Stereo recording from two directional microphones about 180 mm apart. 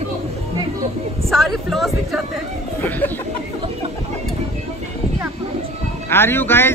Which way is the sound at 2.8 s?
10° left (ahead or behind).